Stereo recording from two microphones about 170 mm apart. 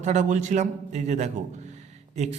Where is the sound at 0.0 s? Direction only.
45° right (ahead or behind).